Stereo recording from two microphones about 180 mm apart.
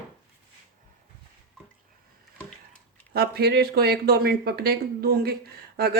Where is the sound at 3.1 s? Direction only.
60° right (ahead or behind).